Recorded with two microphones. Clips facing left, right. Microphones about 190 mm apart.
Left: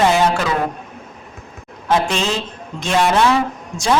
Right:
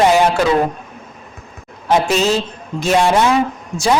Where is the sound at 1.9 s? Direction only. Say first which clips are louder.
Right 4 dB; 10° right (ahead or behind).